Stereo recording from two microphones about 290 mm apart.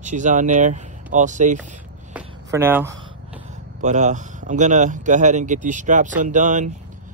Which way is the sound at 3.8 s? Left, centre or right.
Right.